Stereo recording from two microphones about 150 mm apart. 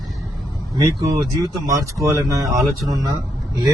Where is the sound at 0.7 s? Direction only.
25° right (ahead or behind).